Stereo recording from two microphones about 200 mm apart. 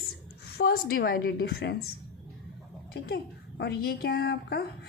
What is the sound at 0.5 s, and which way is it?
A woman's voice, 50° left (ahead or behind).